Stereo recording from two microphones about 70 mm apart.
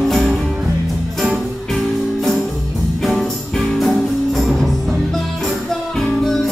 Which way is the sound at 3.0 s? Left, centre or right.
Centre.